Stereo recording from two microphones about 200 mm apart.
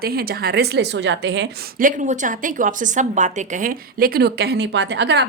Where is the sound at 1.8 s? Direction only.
40° right (ahead or behind); by 5.3 s 60° right (ahead or behind).